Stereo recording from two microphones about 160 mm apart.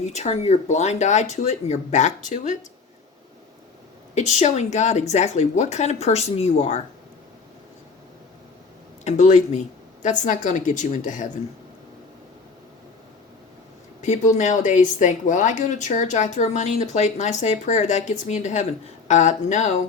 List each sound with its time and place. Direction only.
0.0 s a woman's voice: 45° left (ahead or behind)
4.1 s a woman's voice: 45° left (ahead or behind)
9.0 s a woman's voice: 50° left (ahead or behind)
14.0 s a woman's voice: 50° left (ahead or behind)